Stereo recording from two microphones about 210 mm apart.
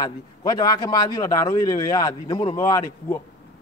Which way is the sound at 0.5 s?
20° left (ahead or behind).